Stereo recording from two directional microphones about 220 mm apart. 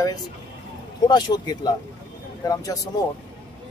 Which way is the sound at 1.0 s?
20° left (ahead or behind).